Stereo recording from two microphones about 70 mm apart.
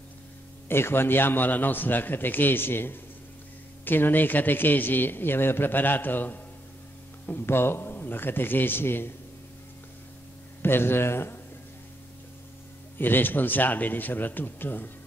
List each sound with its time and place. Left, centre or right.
0.7 s a man's voice: left
10.6 s a man's voice: left
12.9 s a man's voice: left